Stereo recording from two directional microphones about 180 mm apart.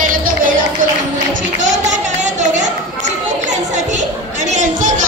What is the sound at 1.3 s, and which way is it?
Music, 90° right.